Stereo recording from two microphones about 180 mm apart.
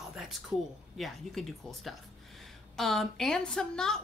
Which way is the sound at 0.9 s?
Centre (ahead or behind).